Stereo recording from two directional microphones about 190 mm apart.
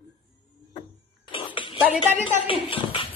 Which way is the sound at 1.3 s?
25° left (ahead or behind).